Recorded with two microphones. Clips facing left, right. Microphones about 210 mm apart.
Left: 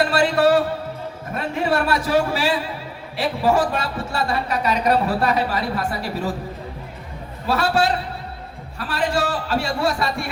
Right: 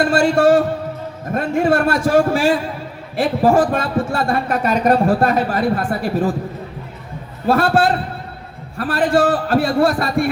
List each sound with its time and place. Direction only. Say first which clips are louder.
0.0 s speech: right 4 dB; 50° right (ahead or behind)
7.4 s speech: right 5 dB; 50° right (ahead or behind)